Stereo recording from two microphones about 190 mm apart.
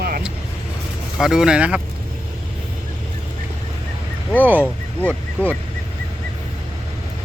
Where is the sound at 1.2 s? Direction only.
Centre (ahead or behind).